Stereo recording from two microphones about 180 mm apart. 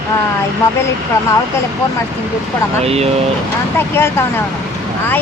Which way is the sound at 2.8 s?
35° right (ahead or behind).